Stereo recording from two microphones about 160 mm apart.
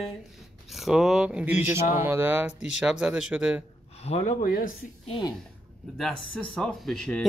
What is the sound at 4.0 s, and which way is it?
Speech, 45° left (ahead or behind).